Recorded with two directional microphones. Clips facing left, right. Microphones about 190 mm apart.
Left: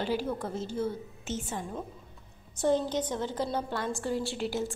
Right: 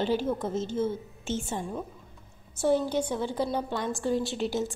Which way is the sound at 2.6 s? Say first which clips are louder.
Right 2 dB; 10° right (ahead or behind).